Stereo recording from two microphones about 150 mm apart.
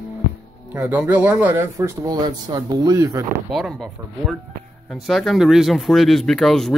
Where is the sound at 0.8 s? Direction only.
10° right (ahead or behind).